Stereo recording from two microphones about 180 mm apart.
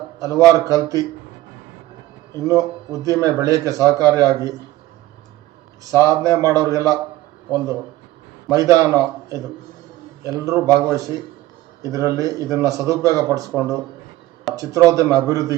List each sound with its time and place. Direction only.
0.2 s a man's voice: 20° right (ahead or behind)
2.3 s a man's voice: 20° right (ahead or behind)
5.8 s a man's voice: 20° right (ahead or behind)
8.4 s a man's voice: 20° right (ahead or behind)
14.5 s a man's voice: 20° right (ahead or behind)